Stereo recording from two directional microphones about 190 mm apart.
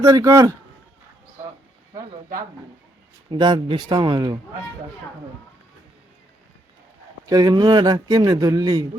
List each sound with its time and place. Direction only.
0.0 s a man's voice: 15° right (ahead or behind)
3.2 s speech: 20° right (ahead or behind)
7.3 s speech: 20° right (ahead or behind)